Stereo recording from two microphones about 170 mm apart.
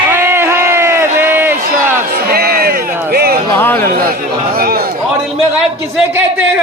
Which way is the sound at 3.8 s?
60° right (ahead or behind).